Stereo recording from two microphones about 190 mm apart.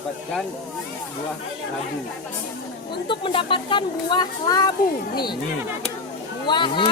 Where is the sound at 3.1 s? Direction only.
25° left (ahead or behind).